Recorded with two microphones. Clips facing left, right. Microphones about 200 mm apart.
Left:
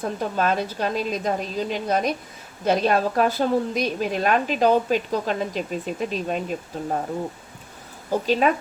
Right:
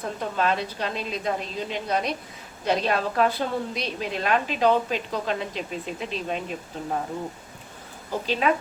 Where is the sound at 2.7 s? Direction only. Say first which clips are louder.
Left 4 dB; 45° left (ahead or behind).